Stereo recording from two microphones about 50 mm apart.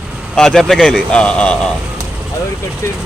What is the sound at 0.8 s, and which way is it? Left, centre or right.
Speech, centre.